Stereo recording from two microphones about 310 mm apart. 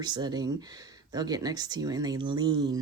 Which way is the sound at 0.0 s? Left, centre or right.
Centre.